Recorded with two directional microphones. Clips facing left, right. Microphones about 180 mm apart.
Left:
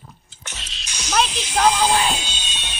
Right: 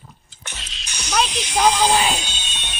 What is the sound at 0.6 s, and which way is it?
Music, 5° left (ahead or behind).